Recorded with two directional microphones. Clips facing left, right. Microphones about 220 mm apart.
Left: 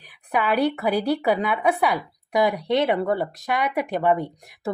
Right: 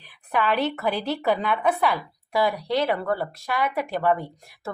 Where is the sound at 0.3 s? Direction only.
10° left (ahead or behind).